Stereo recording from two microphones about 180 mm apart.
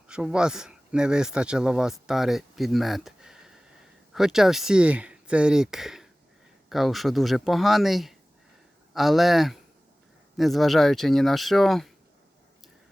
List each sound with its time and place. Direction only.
0.1 s speech: 5° right (ahead or behind)